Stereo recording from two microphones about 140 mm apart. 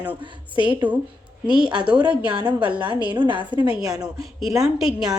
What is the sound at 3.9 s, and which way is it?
A woman's voice, 5° right (ahead or behind).